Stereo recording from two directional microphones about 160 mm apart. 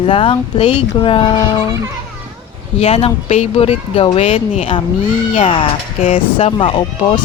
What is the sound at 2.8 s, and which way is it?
Speech, 40° left (ahead or behind).